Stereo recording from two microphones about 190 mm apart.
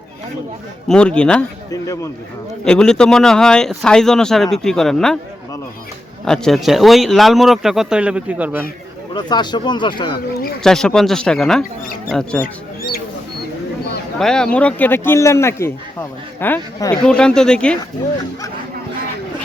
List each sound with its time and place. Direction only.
0.9 s speech: 5° left (ahead or behind)
2.6 s speech: 5° left (ahead or behind)
6.2 s speech: 5° left (ahead or behind)
9.1 s speech: 25° left (ahead or behind)
10.6 s speech: 5° left (ahead or behind)
14.2 s speech: 5° left (ahead or behind)